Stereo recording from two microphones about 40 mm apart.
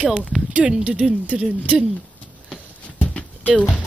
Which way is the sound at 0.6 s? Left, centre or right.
Centre.